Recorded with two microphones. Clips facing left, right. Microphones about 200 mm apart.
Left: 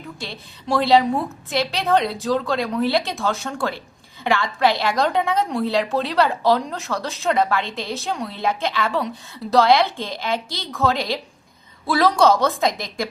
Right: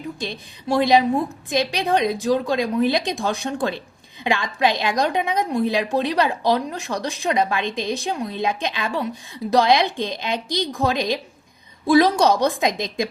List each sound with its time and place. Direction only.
0.2 s a woman's voice: 15° right (ahead or behind)